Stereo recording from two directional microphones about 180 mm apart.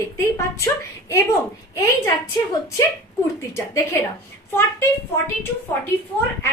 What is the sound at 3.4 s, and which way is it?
Speech, 15° left (ahead or behind).